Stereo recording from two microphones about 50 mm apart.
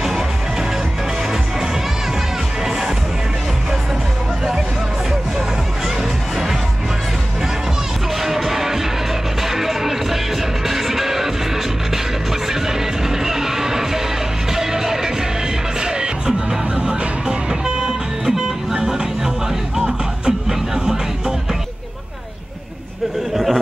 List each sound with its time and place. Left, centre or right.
8.3 s music: centre
13.2 s music: centre
23.3 s chatter: centre